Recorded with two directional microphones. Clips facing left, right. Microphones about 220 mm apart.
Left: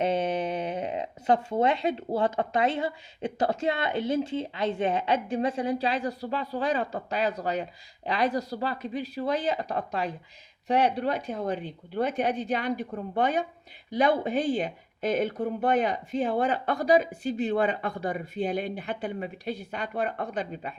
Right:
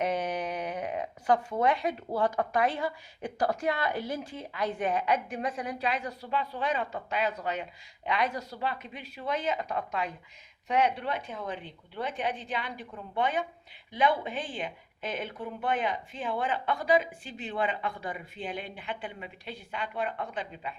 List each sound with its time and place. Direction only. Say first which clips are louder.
0.0 s speech: left 4 dB; 25° left (ahead or behind); by 20.7 s 40° left (ahead or behind)